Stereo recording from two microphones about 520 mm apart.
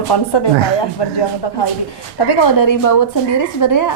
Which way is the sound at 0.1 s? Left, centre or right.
Left.